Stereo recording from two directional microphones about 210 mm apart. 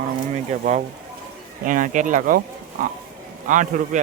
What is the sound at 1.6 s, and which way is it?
Speech, 40° right (ahead or behind).